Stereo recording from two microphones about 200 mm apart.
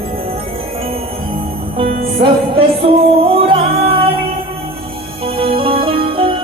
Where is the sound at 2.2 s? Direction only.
25° right (ahead or behind).